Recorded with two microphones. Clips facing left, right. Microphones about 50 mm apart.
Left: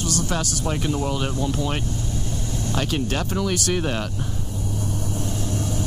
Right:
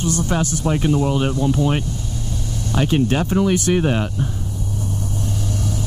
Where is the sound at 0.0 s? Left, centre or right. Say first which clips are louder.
Right 5 dB; right.